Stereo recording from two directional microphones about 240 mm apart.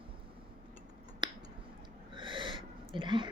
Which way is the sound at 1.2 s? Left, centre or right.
Centre.